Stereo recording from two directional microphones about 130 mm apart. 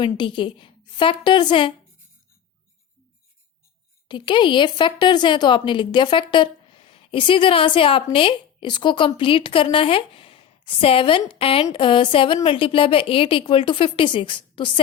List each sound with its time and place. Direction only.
0.0 s a woman's voice: 40° left (ahead or behind)
4.1 s a woman's voice: 35° left (ahead or behind)